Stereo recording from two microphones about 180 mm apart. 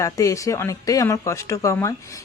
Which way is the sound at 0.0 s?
15° left (ahead or behind).